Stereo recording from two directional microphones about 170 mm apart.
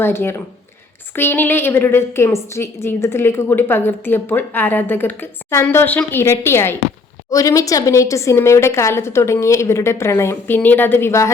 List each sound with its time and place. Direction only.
0.0 s a woman's voice: 15° left (ahead or behind)